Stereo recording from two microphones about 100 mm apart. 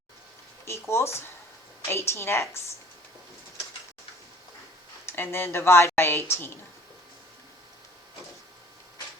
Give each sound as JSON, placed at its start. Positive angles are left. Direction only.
{"t": 0.6, "sound": "speech", "side_deg": 25}
{"t": 5.0, "sound": "speech", "side_deg": 25}